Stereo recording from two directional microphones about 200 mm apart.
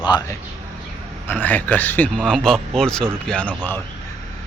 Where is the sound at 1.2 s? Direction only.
10° left (ahead or behind).